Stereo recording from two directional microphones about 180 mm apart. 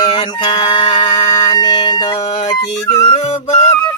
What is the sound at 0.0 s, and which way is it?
Music, 25° left (ahead or behind).